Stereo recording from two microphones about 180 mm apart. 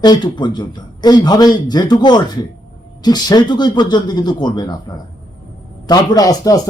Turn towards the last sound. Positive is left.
turn(degrees=20)  # may be behind; listen again after turning